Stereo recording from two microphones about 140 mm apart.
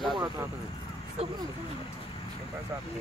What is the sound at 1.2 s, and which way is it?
Speech, 45° right (ahead or behind).